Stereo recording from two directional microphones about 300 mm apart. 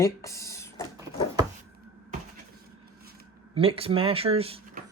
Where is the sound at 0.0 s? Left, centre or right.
Centre.